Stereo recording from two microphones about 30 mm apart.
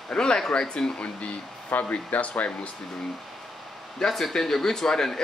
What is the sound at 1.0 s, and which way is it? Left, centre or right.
Speech, left.